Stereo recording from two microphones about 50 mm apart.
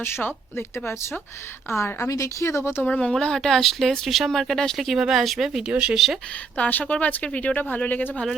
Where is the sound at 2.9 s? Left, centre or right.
Centre.